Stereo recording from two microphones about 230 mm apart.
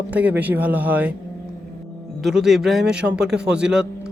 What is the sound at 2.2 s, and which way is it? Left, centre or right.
A man's voice, centre.